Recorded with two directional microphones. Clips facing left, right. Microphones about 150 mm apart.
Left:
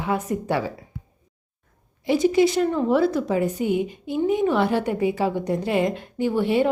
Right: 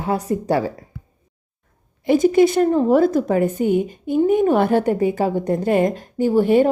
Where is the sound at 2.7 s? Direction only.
40° right (ahead or behind).